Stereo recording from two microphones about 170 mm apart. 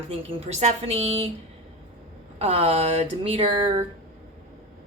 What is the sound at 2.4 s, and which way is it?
A woman's voice, 35° right (ahead or behind).